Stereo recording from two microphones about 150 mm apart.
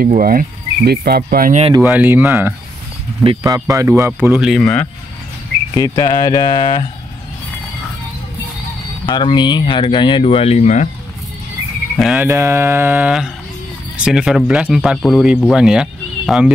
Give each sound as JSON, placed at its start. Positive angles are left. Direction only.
{"t": 0.0, "sound": "speech", "side_deg": -75}
{"t": 1.8, "sound": "mantra", "side_deg": -10}
{"t": 3.4, "sound": "speech", "side_deg": -20}
{"t": 4.0, "sound": "mantra", "side_deg": -15}
{"t": 4.4, "sound": "speech", "side_deg": 0}
{"t": 5.8, "sound": "speech", "side_deg": 30}
{"t": 9.0, "sound": "speech", "side_deg": 30}
{"t": 12.0, "sound": "speech", "side_deg": -5}
{"t": 12.3, "sound": "mantra", "side_deg": -15}
{"t": 13.9, "sound": "speech", "side_deg": -5}